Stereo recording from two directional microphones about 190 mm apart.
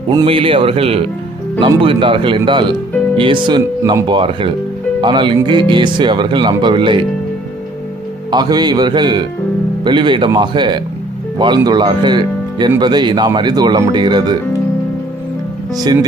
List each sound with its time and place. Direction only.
0.1 s speech: 25° right (ahead or behind)
8.3 s speech: 20° right (ahead or behind)
15.8 s speech: 20° right (ahead or behind)